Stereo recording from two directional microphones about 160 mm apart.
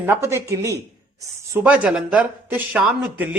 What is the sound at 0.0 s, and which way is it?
A woman's voice, 15° right (ahead or behind).